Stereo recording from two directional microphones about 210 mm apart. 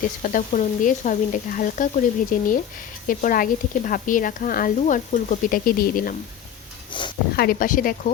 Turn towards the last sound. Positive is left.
turn(degrees=40)  # may be behind; listen again after turning